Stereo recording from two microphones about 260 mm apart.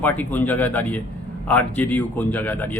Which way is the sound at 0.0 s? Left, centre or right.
Centre.